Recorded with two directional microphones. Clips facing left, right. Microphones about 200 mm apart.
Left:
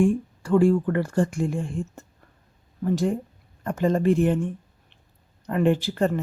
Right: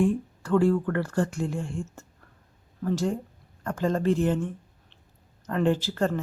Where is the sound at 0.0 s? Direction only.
15° left (ahead or behind).